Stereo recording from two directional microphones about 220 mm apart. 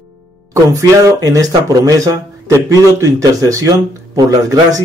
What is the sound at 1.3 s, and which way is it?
A man's voice, 15° right (ahead or behind).